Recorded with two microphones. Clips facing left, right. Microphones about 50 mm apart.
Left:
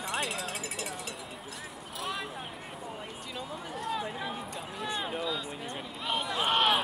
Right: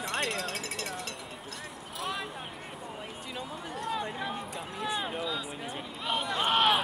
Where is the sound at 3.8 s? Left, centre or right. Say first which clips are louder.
Right 1 dB; centre.